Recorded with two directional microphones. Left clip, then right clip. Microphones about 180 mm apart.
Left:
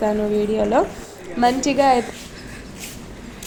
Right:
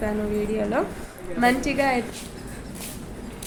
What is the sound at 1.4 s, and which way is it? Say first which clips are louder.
Speech: left 5 dB; 20° left (ahead or behind).